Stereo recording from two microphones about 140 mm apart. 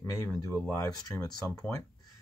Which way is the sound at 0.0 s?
20° left (ahead or behind).